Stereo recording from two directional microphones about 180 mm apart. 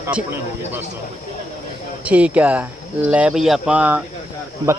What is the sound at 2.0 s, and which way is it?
A man's voice, 5° right (ahead or behind).